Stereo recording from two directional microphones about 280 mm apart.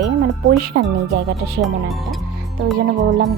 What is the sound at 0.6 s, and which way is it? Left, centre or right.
Speech, right.